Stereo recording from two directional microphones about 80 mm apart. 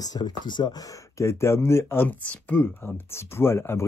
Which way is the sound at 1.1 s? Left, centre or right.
Left.